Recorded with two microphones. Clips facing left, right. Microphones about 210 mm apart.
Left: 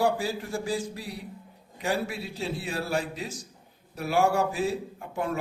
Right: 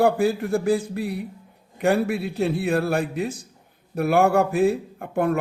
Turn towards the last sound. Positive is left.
turn(degrees=-60)  # may be behind; listen again after turning